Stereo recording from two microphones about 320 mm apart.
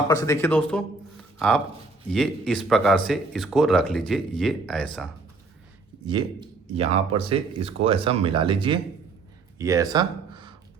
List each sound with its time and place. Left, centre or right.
0.1 s speech: centre
6.1 s speech: centre